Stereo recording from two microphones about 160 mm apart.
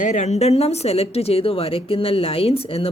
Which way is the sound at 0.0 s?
45° left (ahead or behind).